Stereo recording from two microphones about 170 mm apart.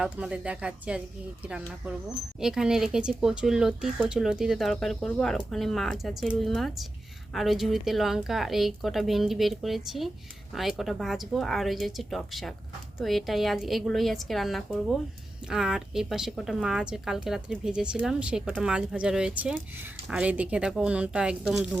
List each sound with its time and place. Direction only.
0.0 s a woman's voice: 5° right (ahead or behind)